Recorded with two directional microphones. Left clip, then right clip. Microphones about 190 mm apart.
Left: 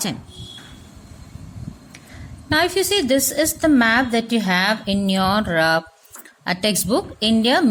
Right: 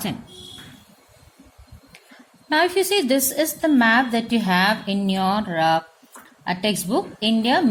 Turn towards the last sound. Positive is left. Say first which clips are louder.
# left 2 dB
turn(degrees=25)  # may be behind; listen again after turning